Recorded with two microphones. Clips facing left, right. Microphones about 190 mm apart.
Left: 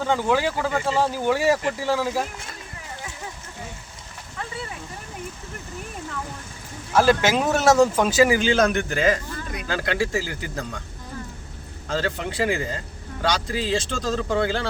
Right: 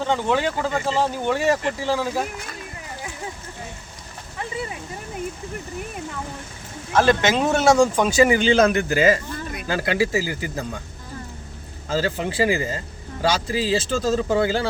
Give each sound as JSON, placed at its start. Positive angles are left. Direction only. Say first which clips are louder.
{"t": 0.1, "sound": "a man's voice", "louder": "left 1 dB", "side_deg": 5}
{"t": 6.9, "sound": "a man's voice", "louder": "even", "side_deg": 10}
{"t": 11.9, "sound": "a man's voice", "louder": "right 3 dB", "side_deg": -5}